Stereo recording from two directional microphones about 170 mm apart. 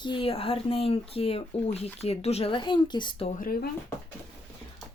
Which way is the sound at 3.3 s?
55° left (ahead or behind).